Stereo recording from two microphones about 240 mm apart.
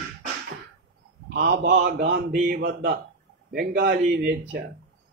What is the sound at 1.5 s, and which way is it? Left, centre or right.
Speech, right.